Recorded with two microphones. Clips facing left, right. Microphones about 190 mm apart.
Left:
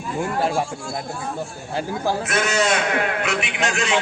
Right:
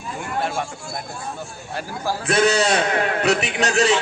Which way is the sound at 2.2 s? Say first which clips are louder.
Right 8 dB; 35° right (ahead or behind).